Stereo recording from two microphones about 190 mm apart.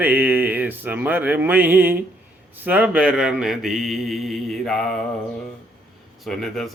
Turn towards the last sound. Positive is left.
turn(degrees=0)  # may be behind; listen again after turning